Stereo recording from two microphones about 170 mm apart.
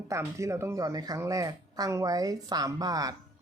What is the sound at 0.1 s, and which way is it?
Speech, 20° right (ahead or behind).